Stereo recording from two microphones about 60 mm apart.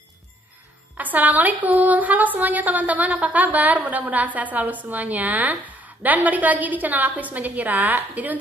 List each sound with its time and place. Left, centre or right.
0.9 s speech: right